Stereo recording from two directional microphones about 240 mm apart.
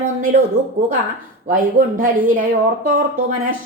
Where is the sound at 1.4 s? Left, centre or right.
Right.